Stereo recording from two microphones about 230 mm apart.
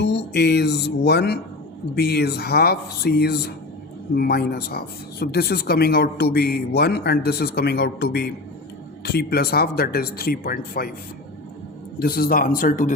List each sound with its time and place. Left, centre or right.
0.0 s speech: left
11.9 s speech: left